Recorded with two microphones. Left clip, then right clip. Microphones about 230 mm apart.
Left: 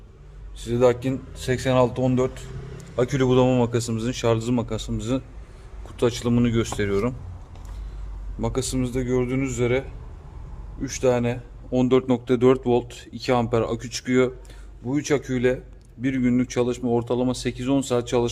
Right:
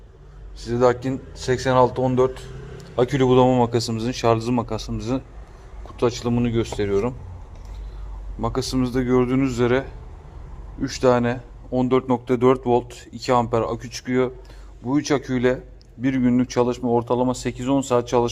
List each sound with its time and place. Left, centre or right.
0.6 s a man's voice: centre
8.4 s a man's voice: centre
11.7 s a man's voice: centre
14.8 s a man's voice: centre